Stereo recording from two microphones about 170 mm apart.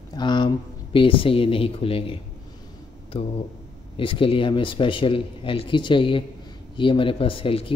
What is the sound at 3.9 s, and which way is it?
Speech, 30° left (ahead or behind).